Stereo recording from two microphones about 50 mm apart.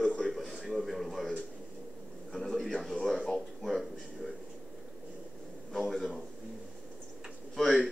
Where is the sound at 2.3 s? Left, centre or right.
Centre.